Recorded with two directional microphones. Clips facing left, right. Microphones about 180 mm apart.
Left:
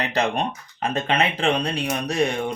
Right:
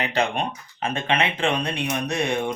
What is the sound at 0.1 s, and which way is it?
Speech, 40° left (ahead or behind).